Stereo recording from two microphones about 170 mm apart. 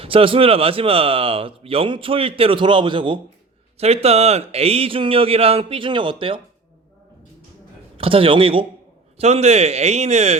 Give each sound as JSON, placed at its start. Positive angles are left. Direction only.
{"t": 0.0, "sound": "speech", "side_deg": -30}
{"t": 7.9, "sound": "speech", "side_deg": -30}